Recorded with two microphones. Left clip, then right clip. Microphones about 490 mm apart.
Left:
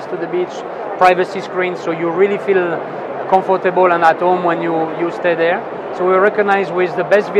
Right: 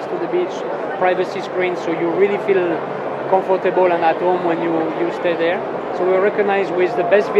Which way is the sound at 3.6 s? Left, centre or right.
Left.